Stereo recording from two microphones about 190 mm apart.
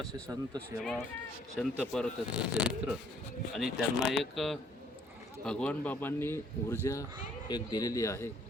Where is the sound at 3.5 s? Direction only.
Centre (ahead or behind); by 8.3 s 15° left (ahead or behind).